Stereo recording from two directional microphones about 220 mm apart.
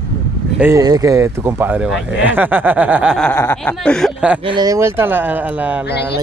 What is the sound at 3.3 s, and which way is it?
Speech, 10° left (ahead or behind).